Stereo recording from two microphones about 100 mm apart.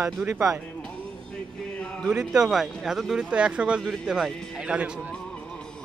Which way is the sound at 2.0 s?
5° right (ahead or behind).